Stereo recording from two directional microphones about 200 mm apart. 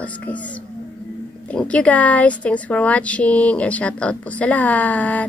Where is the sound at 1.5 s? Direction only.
5° left (ahead or behind).